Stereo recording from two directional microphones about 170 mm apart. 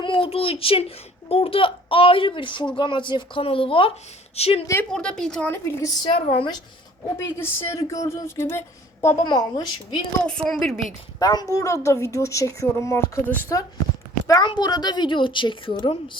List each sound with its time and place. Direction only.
0.0 s a child's voice: 30° left (ahead or behind)
4.6 s speech: 15° left (ahead or behind)
4.9 s a woman's voice: 5° left (ahead or behind)
6.1 s a child's voice: 35° left (ahead or behind)
7.2 s speech: 15° left (ahead or behind)
9.2 s a woman's voice: 25° left (ahead or behind)
10.2 s a woman's voice: 5° left (ahead or behind)
11.2 s a woman's voice: 20° left (ahead or behind)